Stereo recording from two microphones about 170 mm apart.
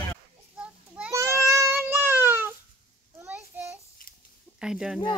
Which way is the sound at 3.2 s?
10° right (ahead or behind).